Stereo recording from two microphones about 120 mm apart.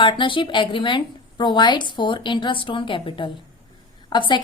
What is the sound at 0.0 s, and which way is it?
A woman's voice, 45° left (ahead or behind).